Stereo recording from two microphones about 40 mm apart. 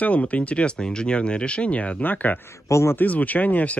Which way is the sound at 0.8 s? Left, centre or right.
Left.